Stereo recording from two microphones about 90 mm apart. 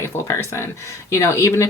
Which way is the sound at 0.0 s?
30° left (ahead or behind).